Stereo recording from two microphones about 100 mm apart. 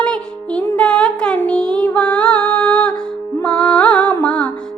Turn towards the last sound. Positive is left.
turn(degrees=10)  # may be behind; listen again after turning